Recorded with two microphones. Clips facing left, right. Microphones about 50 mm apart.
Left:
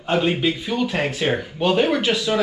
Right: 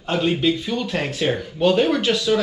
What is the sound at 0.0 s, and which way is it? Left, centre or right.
Speech, centre.